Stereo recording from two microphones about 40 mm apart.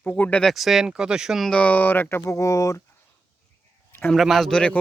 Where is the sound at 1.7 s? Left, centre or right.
Left.